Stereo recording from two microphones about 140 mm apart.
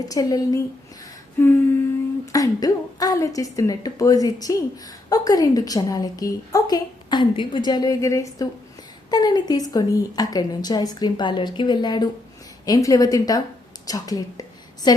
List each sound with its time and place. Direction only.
0.1 s a woman's voice: 25° left (ahead or behind)
1.4 s humming: 15° left (ahead or behind)
2.2 s a woman's voice: 25° left (ahead or behind)